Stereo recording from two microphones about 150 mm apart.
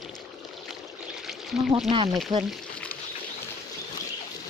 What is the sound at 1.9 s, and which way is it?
Speech, 40° right (ahead or behind).